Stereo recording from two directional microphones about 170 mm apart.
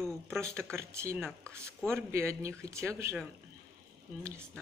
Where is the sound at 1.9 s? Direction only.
15° right (ahead or behind).